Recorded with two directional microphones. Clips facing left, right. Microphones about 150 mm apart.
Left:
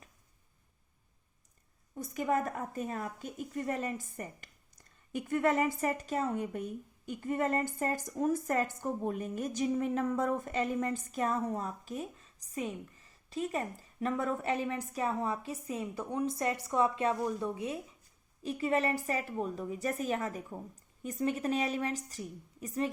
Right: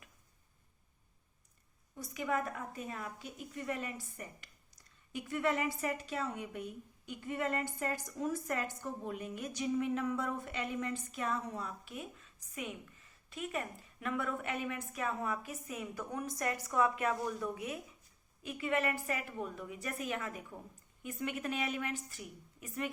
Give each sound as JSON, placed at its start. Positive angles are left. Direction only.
{"t": 2.0, "sound": "a woman's voice", "side_deg": 45}